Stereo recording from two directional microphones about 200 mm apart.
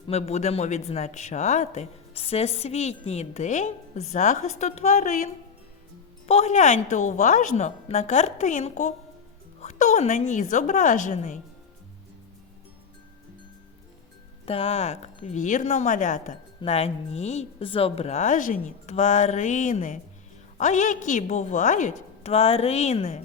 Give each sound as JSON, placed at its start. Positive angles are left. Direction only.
{"t": 0.1, "sound": "a woman's voice", "side_deg": 30}
{"t": 14.4, "sound": "a woman's voice", "side_deg": 30}